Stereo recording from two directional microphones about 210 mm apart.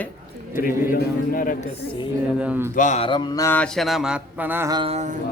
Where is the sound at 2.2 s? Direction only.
5° right (ahead or behind).